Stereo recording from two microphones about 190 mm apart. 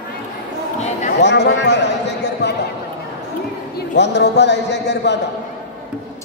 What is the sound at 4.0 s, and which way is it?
Speech, 65° left (ahead or behind).